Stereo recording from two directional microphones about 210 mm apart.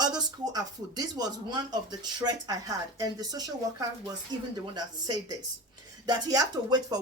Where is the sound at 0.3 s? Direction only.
20° right (ahead or behind).